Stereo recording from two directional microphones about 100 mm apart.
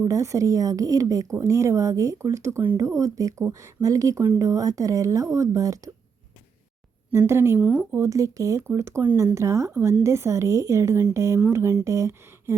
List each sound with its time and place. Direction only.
0.0 s speech: 30° right (ahead or behind)
7.1 s a woman's voice: 25° right (ahead or behind)
7.6 s speech: 15° right (ahead or behind)
7.9 s a woman's voice: 30° right (ahead or behind)